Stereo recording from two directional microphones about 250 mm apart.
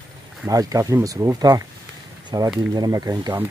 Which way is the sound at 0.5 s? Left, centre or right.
Centre.